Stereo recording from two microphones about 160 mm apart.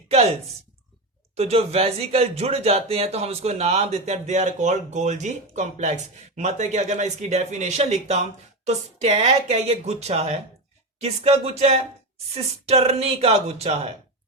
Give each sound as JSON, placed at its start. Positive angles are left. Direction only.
{"t": 1.4, "sound": "speech", "side_deg": -40}